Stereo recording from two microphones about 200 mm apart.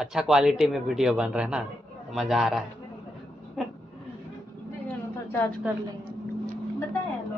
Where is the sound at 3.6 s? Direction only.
Centre (ahead or behind).